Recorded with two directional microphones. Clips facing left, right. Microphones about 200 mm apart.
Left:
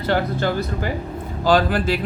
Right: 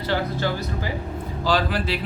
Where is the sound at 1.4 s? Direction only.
50° left (ahead or behind).